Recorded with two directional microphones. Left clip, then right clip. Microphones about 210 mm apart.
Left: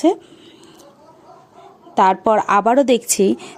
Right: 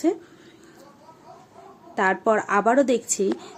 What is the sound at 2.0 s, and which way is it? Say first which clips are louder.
Speech: left 7 dB; 35° left (ahead or behind).